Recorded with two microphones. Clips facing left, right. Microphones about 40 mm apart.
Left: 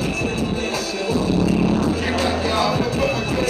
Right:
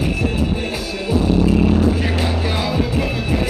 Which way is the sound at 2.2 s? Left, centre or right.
Centre.